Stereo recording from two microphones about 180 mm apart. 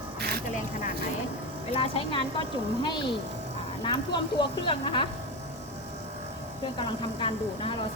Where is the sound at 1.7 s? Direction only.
30° left (ahead or behind).